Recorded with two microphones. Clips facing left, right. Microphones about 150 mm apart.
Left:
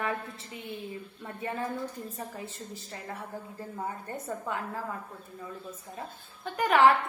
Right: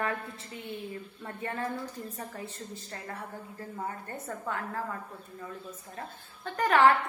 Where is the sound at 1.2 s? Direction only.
10° left (ahead or behind).